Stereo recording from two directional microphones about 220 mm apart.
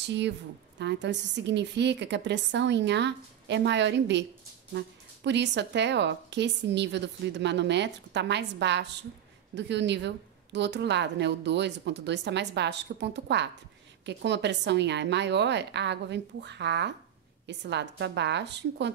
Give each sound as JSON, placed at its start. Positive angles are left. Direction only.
{"t": 0.7, "sound": "a woman's voice", "side_deg": -50}